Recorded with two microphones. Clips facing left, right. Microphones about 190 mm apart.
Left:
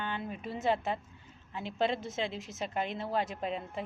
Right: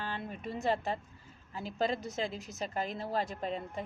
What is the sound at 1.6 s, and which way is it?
A woman's voice, 40° right (ahead or behind).